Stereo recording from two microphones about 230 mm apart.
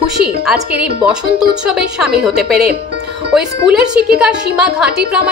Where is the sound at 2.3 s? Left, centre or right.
Right.